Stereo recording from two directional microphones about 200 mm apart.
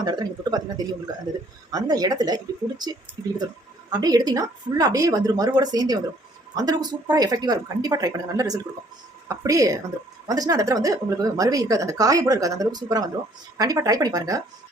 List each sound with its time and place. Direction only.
0.0 s a woman's voice: 20° right (ahead or behind)
1.7 s a woman's voice: 20° right (ahead or behind)